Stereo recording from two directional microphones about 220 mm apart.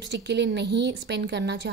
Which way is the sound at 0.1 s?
50° right (ahead or behind).